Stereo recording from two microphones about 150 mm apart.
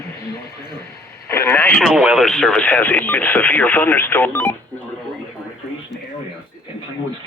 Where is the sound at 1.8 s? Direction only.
5° right (ahead or behind); by 4.8 s 10° left (ahead or behind).